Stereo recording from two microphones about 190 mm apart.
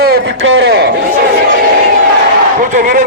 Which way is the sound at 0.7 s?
55° right (ahead or behind).